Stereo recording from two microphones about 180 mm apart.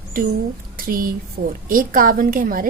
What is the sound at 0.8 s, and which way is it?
A woman's voice, 55° right (ahead or behind).